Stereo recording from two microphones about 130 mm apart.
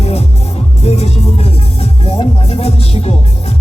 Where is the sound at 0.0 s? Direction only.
55° left (ahead or behind).